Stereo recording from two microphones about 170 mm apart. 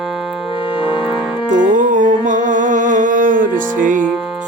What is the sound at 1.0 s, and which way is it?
Music, centre (ahead or behind).